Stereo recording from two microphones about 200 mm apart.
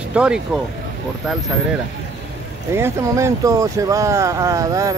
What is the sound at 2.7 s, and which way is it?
Speech, 15° right (ahead or behind).